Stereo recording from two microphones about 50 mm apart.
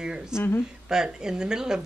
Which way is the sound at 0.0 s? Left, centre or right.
Centre.